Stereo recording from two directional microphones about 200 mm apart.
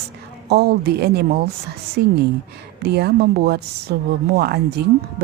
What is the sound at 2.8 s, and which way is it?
A woman's voice, 55° right (ahead or behind).